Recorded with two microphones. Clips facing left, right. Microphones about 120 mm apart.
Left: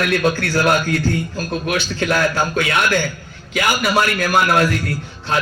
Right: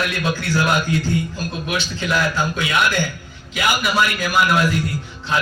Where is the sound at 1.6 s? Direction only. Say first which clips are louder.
Left 3 dB; 55° left (ahead or behind).